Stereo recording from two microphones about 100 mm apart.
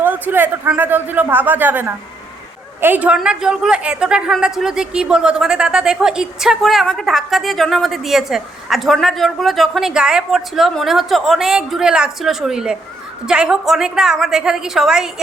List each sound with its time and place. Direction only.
0.0 s a man's voice: 20° right (ahead or behind)